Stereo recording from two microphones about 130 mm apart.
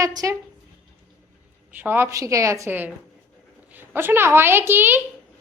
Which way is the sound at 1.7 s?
15° right (ahead or behind).